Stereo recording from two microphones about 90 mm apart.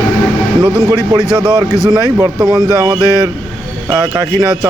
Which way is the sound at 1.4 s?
55° right (ahead or behind).